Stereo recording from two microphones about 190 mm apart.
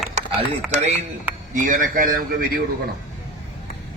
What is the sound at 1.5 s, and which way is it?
Speech, 45° right (ahead or behind).